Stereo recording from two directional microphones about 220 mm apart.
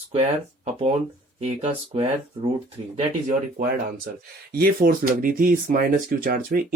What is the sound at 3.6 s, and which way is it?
Speech, 40° right (ahead or behind).